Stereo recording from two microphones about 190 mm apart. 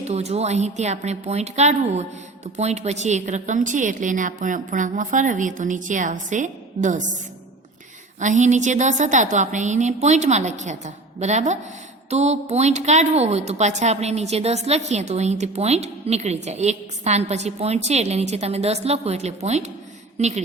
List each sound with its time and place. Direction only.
0.0 s a woman's voice: 35° right (ahead or behind)
8.2 s a woman's voice: 40° right (ahead or behind)